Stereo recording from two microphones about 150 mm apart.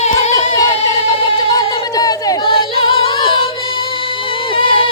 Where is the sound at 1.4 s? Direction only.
30° left (ahead or behind).